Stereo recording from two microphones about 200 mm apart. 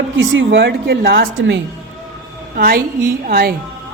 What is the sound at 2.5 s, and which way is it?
A woman's voice, 45° right (ahead or behind).